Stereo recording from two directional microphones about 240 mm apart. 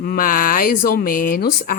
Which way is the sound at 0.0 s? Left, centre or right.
Left.